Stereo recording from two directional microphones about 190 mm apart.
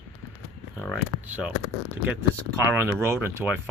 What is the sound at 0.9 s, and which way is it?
Speech, 5° right (ahead or behind).